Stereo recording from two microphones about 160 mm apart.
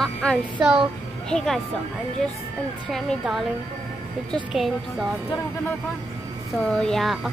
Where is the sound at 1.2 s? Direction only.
5° left (ahead or behind).